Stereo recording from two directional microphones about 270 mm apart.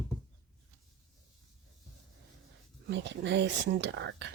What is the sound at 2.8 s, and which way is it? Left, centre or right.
Speech, right.